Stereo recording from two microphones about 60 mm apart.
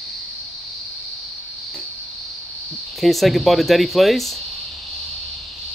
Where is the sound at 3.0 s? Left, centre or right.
Centre.